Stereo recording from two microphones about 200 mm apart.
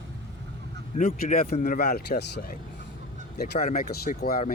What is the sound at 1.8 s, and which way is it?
Speech, 50° left (ahead or behind).